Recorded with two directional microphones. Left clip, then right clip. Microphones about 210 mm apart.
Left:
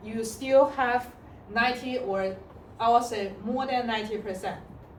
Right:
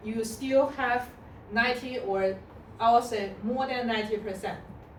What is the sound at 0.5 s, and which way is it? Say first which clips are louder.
A woman's voice: left 4 dB; 20° left (ahead or behind).